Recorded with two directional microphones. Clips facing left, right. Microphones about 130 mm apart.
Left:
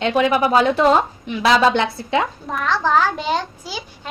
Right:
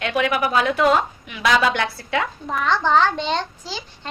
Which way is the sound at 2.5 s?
Centre (ahead or behind).